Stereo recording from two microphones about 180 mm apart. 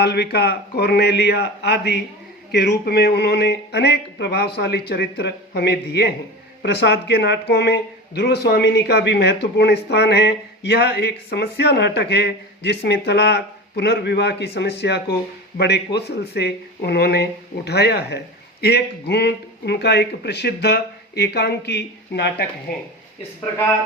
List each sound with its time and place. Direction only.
0.0 s speech: 65° left (ahead or behind)